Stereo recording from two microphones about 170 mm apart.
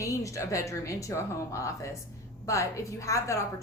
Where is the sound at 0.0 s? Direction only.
20° left (ahead or behind).